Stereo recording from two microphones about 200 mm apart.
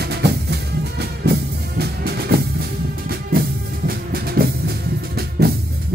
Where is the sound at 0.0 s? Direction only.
55° right (ahead or behind).